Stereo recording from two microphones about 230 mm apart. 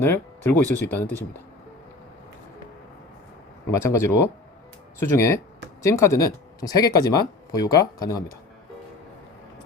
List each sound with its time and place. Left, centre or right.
0.0 s speech: centre
3.7 s speech: centre